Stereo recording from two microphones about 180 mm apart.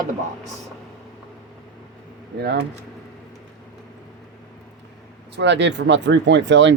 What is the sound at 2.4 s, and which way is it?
Speech, 65° right (ahead or behind).